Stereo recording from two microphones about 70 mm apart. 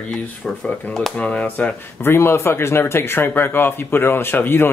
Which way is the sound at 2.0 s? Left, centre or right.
Left.